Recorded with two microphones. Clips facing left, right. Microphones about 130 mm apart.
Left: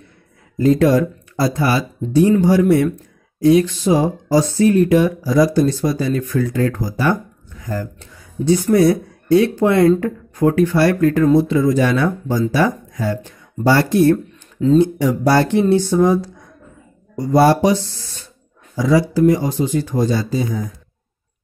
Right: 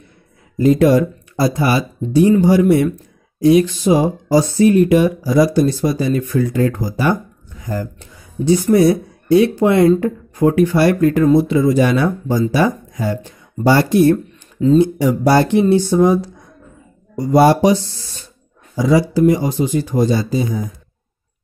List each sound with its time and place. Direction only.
0.6 s speech: 15° right (ahead or behind)
14.1 s speech: centre (ahead or behind)
18.8 s speech: 15° right (ahead or behind)